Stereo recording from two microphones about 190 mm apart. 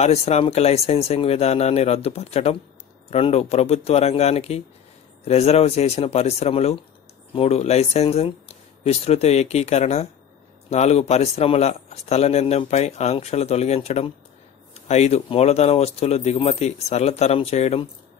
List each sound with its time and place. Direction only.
0.0 s speech: 35° left (ahead or behind)